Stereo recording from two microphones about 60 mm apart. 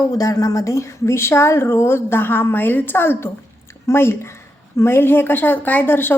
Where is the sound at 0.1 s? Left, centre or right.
Left.